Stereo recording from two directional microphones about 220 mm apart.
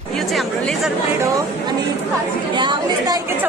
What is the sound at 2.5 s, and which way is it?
Speech, 20° right (ahead or behind).